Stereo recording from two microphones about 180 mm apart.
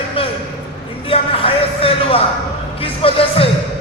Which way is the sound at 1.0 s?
30° left (ahead or behind).